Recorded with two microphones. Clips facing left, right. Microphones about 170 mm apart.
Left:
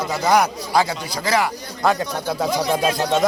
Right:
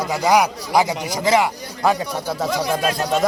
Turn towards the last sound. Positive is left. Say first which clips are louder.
# left 1 dB
turn(degrees=0)  # may be behind; listen again after turning